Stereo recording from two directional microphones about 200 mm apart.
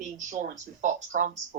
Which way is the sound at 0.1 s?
40° right (ahead or behind).